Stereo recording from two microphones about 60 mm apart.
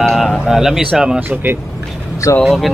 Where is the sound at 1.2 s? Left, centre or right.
Right.